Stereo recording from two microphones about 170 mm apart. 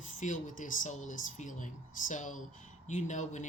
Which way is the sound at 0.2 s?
50° left (ahead or behind).